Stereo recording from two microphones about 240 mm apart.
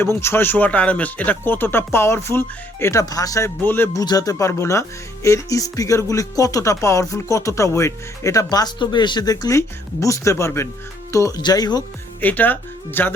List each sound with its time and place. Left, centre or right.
0.0 s speech: centre